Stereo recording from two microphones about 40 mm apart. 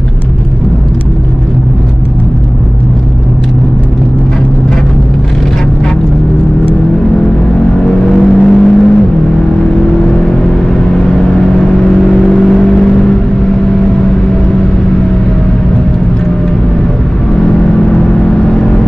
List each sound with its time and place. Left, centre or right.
7.8 s vehicle: centre
12.3 s vehicle: centre
17.7 s vehicle: left